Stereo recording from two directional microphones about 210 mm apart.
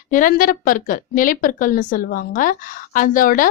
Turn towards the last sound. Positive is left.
turn(degrees=40)  # may be behind; listen again after turning